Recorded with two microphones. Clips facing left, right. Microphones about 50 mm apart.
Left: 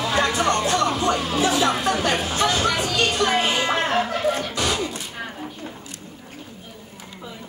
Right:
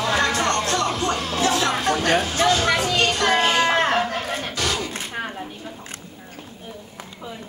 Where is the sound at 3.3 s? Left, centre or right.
Centre.